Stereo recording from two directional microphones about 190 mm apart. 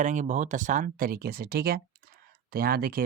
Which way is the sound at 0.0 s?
40° right (ahead or behind).